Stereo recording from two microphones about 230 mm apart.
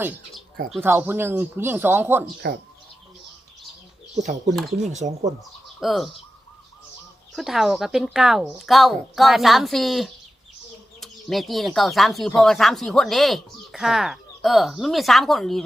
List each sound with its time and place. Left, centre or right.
0.7 s speech: centre
4.2 s speech: right
5.8 s speech: centre
7.3 s speech: centre